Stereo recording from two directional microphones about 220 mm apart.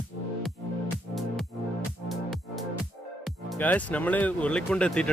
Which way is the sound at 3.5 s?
5° left (ahead or behind).